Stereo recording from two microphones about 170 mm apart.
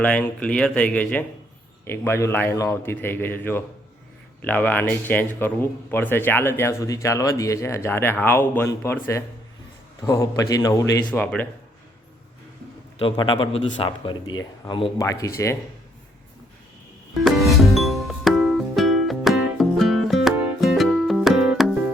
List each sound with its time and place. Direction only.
0.0 s speech: 10° left (ahead or behind)
13.0 s speech: 30° left (ahead or behind)
17.2 s music: centre (ahead or behind)